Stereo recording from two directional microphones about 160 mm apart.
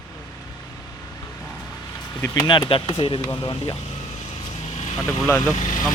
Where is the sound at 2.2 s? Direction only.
25° left (ahead or behind).